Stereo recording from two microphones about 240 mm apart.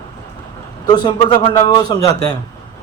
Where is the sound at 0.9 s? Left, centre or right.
Centre.